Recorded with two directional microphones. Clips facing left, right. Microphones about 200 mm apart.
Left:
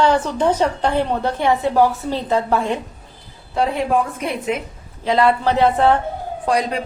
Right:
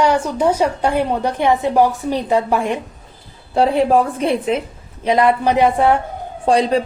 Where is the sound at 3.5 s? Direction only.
30° right (ahead or behind).